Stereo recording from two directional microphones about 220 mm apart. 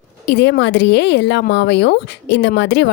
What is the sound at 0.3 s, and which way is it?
Speech, 55° left (ahead or behind).